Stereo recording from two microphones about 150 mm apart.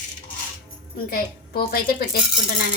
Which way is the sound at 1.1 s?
90° left.